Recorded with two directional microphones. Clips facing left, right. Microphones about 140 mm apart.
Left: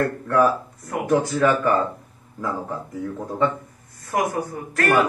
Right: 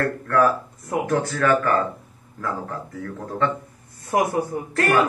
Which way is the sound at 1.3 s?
15° left (ahead or behind).